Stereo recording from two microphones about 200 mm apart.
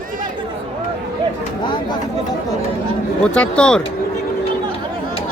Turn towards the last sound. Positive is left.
turn(degrees=5)  # may be behind; listen again after turning